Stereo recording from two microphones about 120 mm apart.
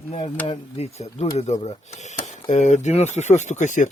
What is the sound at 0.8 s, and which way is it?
Speech, 60° left (ahead or behind).